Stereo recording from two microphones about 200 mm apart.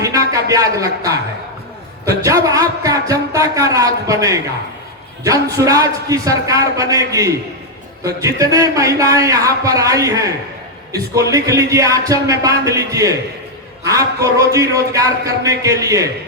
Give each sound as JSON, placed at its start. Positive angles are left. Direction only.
{"t": 0.5, "sound": "a man's voice", "side_deg": -15}
{"t": 2.2, "sound": "a man's voice", "side_deg": -15}